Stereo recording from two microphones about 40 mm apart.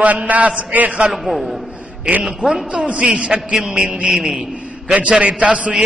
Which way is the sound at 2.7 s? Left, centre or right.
Right.